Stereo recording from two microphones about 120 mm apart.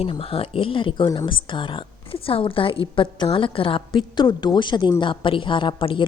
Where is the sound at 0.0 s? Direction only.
50° left (ahead or behind).